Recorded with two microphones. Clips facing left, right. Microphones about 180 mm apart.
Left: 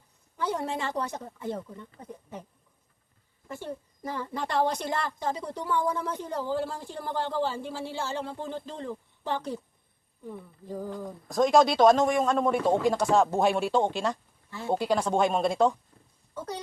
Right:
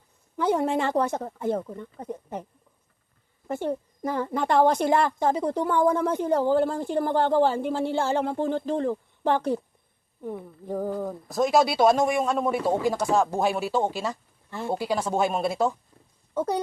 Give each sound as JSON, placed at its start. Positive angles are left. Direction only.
{"t": 0.3, "sound": "speech", "side_deg": -55}
{"t": 11.3, "sound": "speech", "side_deg": -5}
{"t": 16.3, "sound": "speech", "side_deg": -55}